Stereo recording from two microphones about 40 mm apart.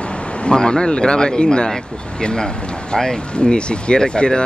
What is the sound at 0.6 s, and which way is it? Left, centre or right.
Speech, centre.